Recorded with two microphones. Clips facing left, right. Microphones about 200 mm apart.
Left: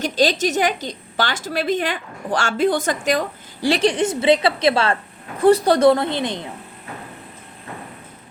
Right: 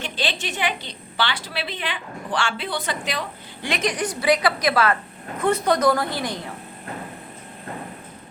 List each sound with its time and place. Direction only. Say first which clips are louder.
0.0 s a woman's voice: left 10 dB; 40° left (ahead or behind); by 6.4 s 25° left (ahead or behind)